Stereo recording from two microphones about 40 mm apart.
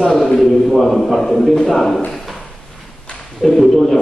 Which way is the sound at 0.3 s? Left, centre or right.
Centre.